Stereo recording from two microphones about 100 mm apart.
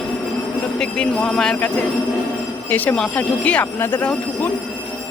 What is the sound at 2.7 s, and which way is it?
Speech, 15° left (ahead or behind).